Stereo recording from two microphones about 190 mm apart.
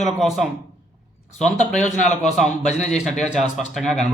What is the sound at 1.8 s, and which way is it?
Speech, 40° left (ahead or behind).